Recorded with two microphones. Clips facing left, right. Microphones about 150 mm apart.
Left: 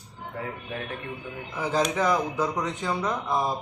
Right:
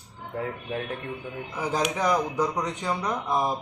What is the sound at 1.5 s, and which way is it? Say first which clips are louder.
Speech: left 2 dB; 15° right (ahead or behind).